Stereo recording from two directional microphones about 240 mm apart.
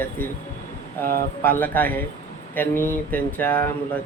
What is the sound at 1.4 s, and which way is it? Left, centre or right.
A man's voice, centre.